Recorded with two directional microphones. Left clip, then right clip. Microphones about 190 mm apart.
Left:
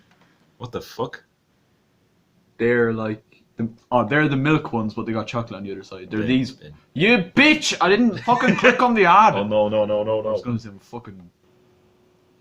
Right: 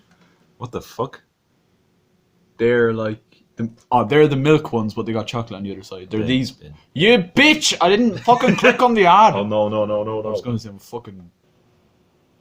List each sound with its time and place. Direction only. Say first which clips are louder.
0.6 s speech: right 2 dB; 35° right (ahead or behind)
2.6 s speech: right 3 dB; 25° right (ahead or behind)
3.8 s speech: right 5 dB; 35° right (ahead or behind)